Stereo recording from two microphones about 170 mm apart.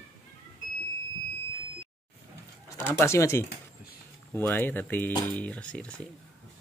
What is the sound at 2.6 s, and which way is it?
Speech, 15° left (ahead or behind).